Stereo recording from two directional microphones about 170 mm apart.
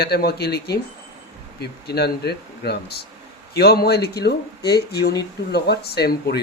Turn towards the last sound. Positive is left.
turn(degrees=70)  # may be behind; listen again after turning